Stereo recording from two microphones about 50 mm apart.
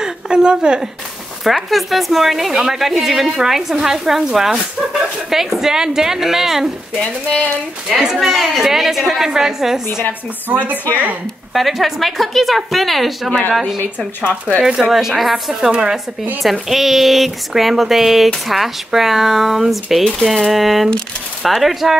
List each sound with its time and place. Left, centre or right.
0.0 s a sound: centre
1.4 s a woman's voice: centre
7.9 s a woman's voice: centre
10.5 s speech: right
11.5 s speech: centre
14.6 s a woman's voice: centre